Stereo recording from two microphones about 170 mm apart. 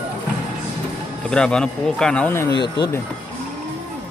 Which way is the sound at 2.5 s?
25° left (ahead or behind).